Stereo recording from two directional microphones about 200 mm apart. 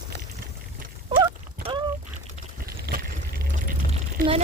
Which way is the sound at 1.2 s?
20° right (ahead or behind).